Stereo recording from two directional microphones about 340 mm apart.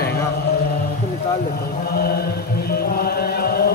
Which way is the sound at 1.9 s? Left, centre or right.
Left.